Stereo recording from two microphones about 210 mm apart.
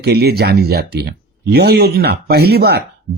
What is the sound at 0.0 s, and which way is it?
Speech, 50° right (ahead or behind).